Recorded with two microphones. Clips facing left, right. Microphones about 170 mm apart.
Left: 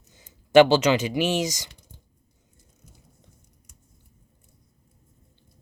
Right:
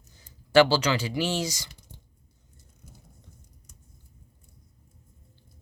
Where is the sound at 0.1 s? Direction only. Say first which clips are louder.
Left 5 dB; 20° left (ahead or behind).